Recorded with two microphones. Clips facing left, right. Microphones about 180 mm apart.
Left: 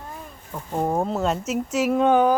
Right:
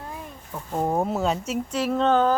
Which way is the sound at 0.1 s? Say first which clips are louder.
Even; centre (ahead or behind).